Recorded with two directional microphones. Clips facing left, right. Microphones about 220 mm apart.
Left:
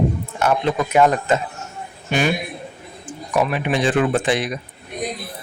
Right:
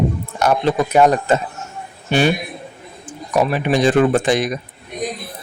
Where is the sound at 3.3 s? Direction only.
40° right (ahead or behind).